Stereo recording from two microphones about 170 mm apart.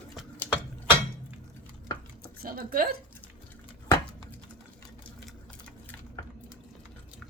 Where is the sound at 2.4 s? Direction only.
60° right (ahead or behind).